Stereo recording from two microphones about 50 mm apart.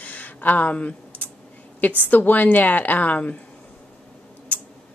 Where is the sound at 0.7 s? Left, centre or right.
Left.